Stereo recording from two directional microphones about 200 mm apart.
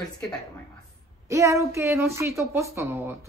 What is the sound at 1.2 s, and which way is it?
A woman's voice, 15° right (ahead or behind).